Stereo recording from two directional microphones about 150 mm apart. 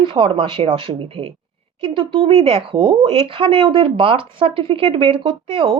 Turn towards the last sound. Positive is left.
turn(degrees=-35)  # may be behind; listen again after turning